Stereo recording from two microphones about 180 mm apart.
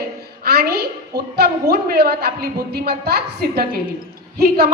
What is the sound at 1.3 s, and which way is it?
Speech, 60° right (ahead or behind).